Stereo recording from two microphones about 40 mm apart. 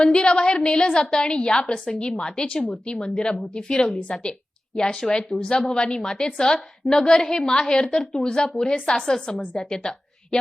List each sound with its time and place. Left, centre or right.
0.0 s a woman's voice: left